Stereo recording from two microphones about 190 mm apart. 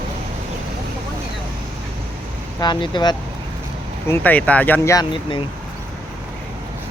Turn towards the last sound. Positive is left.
turn(degrees=25)  # may be behind; listen again after turning